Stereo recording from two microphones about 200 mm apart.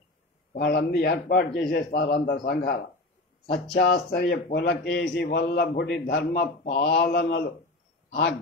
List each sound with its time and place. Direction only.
0.6 s a man's voice: 50° left (ahead or behind)
6.6 s speech: 45° left (ahead or behind)